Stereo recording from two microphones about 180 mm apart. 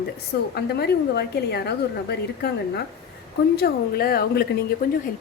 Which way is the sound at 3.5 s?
60° left (ahead or behind).